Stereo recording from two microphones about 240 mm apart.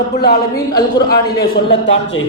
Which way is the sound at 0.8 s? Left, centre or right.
Centre.